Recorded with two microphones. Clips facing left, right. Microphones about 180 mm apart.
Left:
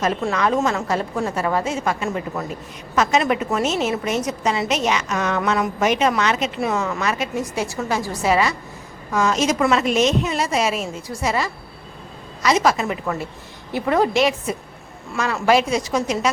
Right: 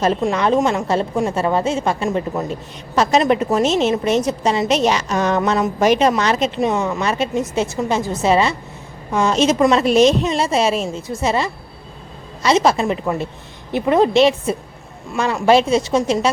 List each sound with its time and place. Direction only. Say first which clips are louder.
0.3 s a woman's voice: right 3 dB; 30° right (ahead or behind)
6.6 s a woman's voice: right 4 dB; 20° right (ahead or behind)